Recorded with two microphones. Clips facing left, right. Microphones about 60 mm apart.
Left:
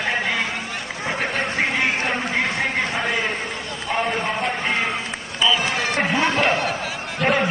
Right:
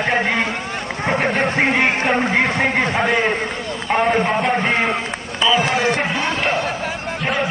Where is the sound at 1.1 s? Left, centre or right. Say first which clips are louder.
Right 6 dB; right.